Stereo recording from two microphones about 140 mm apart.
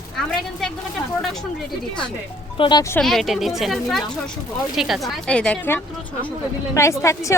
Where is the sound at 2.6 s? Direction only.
35° left (ahead or behind).